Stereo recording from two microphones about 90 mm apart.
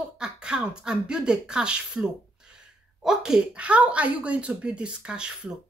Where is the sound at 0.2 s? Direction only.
10° right (ahead or behind).